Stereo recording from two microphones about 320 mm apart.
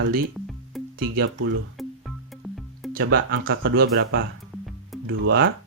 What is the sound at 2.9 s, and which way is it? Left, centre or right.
Speech, right.